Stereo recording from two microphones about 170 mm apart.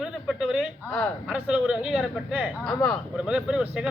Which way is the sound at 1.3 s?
5° right (ahead or behind).